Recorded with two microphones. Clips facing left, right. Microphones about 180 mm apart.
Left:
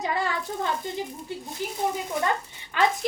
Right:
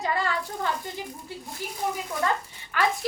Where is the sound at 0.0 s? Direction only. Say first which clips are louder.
Even; 20° left (ahead or behind).